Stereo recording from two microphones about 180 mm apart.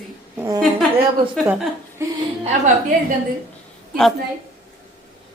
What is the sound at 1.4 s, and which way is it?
Speech, 10° right (ahead or behind).